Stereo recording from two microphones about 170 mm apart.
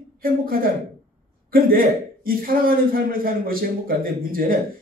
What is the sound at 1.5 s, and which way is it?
A man's voice, 60° right (ahead or behind).